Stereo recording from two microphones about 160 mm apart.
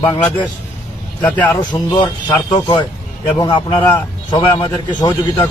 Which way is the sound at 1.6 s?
25° left (ahead or behind).